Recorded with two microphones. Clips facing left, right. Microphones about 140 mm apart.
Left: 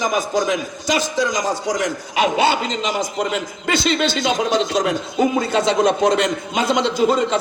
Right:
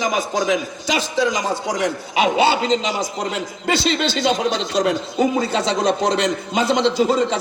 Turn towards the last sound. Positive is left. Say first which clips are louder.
# even
turn(degrees=50)  # may be behind; listen again after turning